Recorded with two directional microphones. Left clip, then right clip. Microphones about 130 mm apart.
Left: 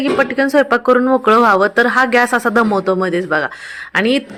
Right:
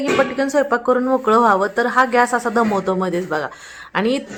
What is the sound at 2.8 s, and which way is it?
A man's voice, 15° left (ahead or behind).